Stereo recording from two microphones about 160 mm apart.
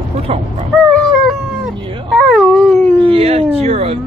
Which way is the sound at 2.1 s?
Centre (ahead or behind).